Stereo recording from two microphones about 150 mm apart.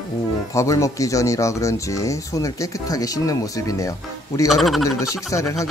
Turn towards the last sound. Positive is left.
turn(degrees=20)  # may be behind; listen again after turning